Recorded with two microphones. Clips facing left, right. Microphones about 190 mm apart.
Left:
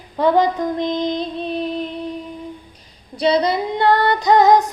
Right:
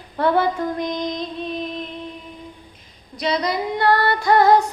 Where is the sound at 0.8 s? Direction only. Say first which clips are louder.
Left 4 dB; 25° left (ahead or behind).